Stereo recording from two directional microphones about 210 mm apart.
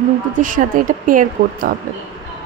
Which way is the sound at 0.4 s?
40° right (ahead or behind).